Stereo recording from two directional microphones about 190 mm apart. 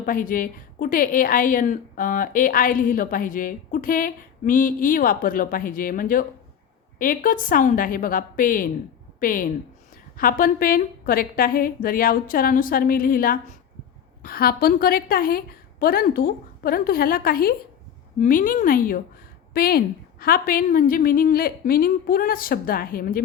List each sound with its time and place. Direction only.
0.0 s a woman's voice: 45° left (ahead or behind)